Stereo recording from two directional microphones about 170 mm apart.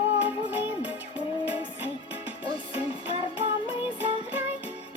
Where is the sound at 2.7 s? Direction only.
35° left (ahead or behind).